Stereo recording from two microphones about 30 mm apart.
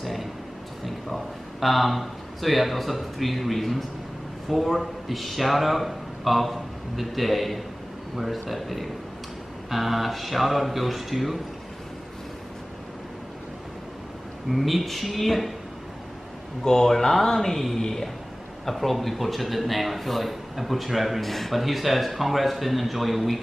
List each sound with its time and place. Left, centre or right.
0.0 s a sound: centre
0.8 s a man's voice: centre
14.5 s a man's voice: centre
16.6 s a man's voice: centre